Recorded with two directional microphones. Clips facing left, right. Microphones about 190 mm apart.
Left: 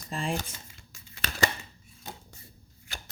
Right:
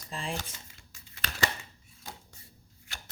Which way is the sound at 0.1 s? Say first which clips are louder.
Left 5 dB; 50° left (ahead or behind).